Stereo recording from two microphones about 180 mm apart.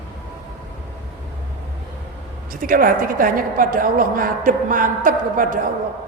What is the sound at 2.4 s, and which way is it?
A woman's voice, 50° right (ahead or behind).